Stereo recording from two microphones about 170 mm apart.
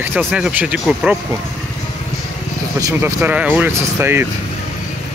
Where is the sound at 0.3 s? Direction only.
10° right (ahead or behind).